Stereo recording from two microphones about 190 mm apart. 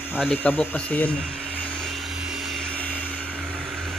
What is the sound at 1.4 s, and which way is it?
Vehicle, 5° left (ahead or behind).